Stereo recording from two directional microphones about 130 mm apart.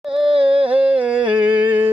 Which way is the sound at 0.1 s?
45° right (ahead or behind).